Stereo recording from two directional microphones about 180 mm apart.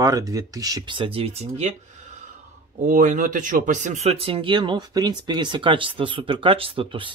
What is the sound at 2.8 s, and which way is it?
Speech, 45° right (ahead or behind).